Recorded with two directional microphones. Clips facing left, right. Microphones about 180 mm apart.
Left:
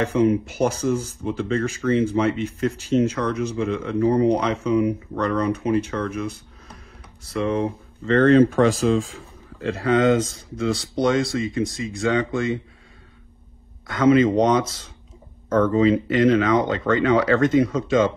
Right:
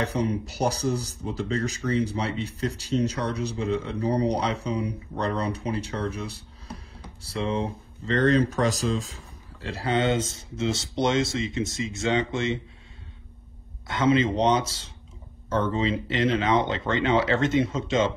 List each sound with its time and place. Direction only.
0.1 s speech: 90° left
0.5 s speech: 35° right (ahead or behind)
8.1 s speech: 35° left (ahead or behind)
9.7 s speech: 30° right (ahead or behind)
13.8 s speech: 25° right (ahead or behind)